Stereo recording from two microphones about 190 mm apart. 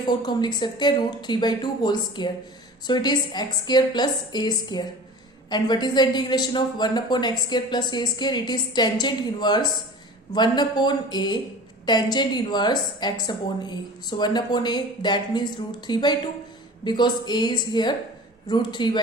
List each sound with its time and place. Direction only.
0.0 s a woman's voice: 25° left (ahead or behind)